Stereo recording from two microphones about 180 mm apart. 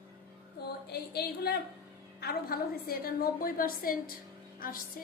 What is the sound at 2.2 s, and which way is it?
A woman's voice, 55° left (ahead or behind).